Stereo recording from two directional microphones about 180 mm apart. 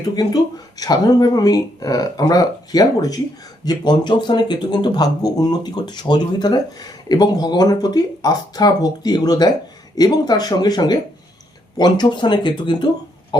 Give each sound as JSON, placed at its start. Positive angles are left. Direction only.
{"t": 0.2, "sound": "speech", "side_deg": 20}